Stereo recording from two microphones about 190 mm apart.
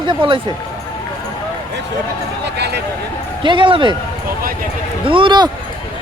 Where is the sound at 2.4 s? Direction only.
60° right (ahead or behind).